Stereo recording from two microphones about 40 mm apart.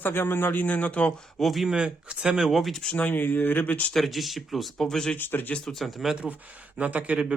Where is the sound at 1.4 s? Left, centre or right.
Centre.